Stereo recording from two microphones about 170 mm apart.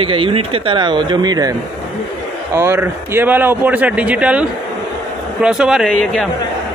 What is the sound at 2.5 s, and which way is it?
Speech, 15° right (ahead or behind).